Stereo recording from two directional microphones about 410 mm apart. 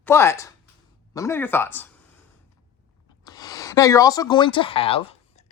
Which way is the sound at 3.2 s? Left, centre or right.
Centre.